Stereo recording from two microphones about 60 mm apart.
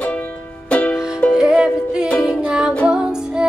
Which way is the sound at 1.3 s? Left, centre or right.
Centre.